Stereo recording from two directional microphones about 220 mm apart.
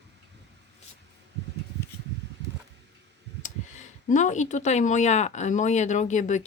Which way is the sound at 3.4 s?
35° left (ahead or behind).